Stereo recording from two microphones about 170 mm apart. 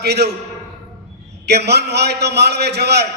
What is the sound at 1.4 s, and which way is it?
A man's voice, 75° right (ahead or behind).